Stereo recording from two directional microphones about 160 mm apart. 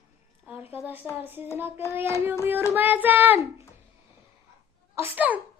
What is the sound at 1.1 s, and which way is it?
Speech, 10° right (ahead or behind).